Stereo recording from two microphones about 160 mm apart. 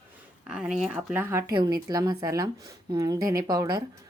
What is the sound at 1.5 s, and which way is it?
Speech, 30° right (ahead or behind).